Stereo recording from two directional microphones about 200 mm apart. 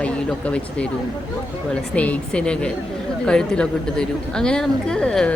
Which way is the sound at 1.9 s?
5° left (ahead or behind).